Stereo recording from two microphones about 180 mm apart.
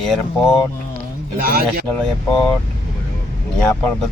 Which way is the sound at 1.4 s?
55° right (ahead or behind).